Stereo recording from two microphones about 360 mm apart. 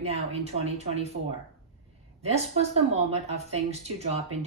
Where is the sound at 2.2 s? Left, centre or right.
Centre.